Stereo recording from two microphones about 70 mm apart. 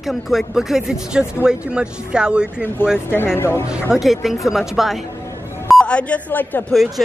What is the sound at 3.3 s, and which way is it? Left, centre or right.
Speech, left.